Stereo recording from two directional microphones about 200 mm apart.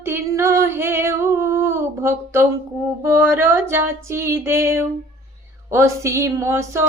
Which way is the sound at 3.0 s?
15° right (ahead or behind).